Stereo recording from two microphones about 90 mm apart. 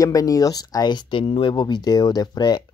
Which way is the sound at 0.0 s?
40° left (ahead or behind).